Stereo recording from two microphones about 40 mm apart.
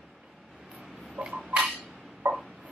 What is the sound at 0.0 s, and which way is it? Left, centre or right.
Vehicle, centre.